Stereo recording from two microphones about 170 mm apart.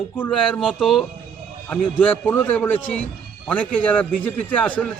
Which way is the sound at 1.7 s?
10° left (ahead or behind).